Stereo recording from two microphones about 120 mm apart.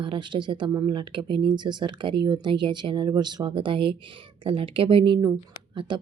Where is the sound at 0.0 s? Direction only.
45° right (ahead or behind).